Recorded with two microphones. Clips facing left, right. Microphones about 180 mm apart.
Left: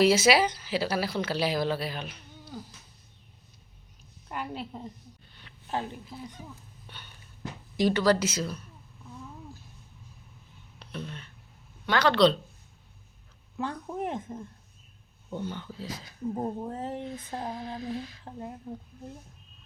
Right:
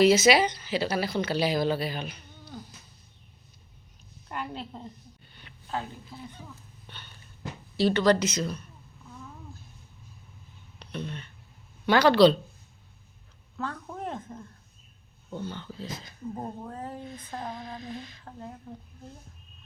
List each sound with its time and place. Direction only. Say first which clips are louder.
0.0 s speech: right 2 dB; 5° left (ahead or behind)
4.3 s a woman's voice: even; 5° left (ahead or behind)
5.3 s a sound: right 2 dB; centre (ahead or behind)
6.4 s speech: left 1 dB; 10° left (ahead or behind)
6.8 s a sound: right 1 dB; 10° left (ahead or behind)
7.8 s speech: right 1 dB; 10° left (ahead or behind)
10.8 s speech: right 3 dB; centre (ahead or behind)
11.9 s speech: right 4 dB; 10° right (ahead or behind)
13.6 s speech: left 3 dB; 15° left (ahead or behind)
16.6 s speech: left 4 dB; 25° left (ahead or behind)
17.1 s speech: left 2 dB; 10° left (ahead or behind)